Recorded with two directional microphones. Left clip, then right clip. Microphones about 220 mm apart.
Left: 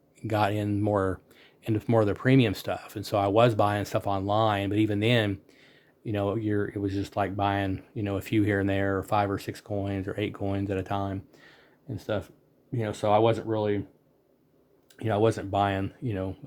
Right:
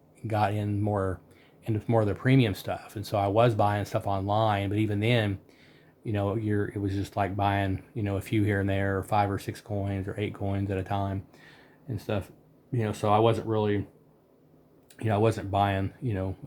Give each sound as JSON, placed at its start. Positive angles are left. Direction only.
{"t": 0.2, "sound": "speech", "side_deg": 35}
{"t": 14.9, "sound": "speech", "side_deg": 30}